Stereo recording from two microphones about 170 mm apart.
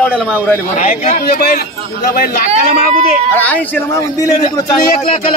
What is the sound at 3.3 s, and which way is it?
A man's voice, 10° left (ahead or behind).